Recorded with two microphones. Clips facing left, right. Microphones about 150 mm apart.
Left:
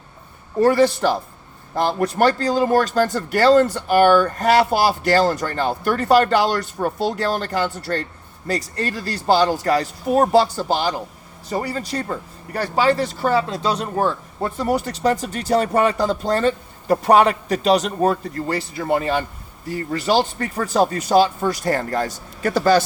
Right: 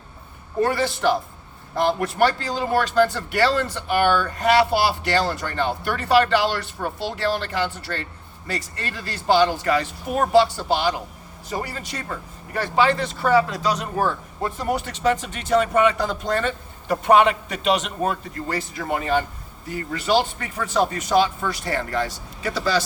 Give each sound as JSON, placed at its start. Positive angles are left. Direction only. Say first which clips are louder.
{"t": 0.6, "sound": "speech", "louder": "left 5 dB", "side_deg": 40}
{"t": 14.6, "sound": "speech", "louder": "left 3 dB", "side_deg": 40}